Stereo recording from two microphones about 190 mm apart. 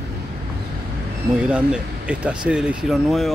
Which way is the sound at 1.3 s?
5° right (ahead or behind).